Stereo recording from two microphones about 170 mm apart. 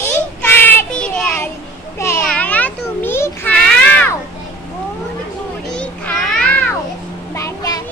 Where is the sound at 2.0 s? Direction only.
10° left (ahead or behind).